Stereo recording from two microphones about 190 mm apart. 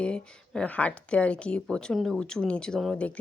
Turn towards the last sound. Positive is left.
turn(degrees=5)  # may be behind; listen again after turning